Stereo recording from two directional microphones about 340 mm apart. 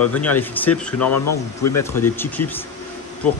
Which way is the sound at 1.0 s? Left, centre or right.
Left.